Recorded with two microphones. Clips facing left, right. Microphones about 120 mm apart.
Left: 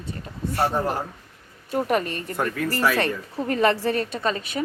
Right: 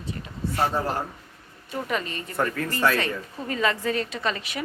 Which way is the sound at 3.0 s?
50° left (ahead or behind).